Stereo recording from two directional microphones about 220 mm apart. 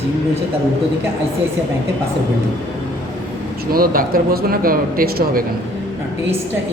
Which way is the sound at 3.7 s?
40° right (ahead or behind).